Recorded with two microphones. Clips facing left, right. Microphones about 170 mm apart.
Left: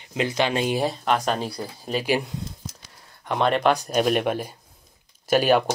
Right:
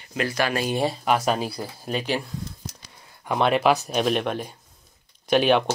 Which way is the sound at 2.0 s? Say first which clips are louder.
Left 6 dB; 15° left (ahead or behind).